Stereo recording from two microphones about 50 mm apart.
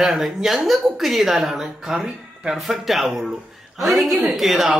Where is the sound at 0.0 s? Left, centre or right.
Centre.